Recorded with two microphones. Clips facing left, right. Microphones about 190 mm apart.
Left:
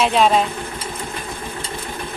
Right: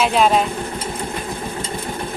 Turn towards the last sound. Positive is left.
turn(degrees=0)  # may be behind; listen again after turning